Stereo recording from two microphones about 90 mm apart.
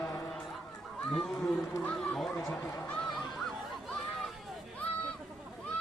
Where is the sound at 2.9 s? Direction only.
5° left (ahead or behind).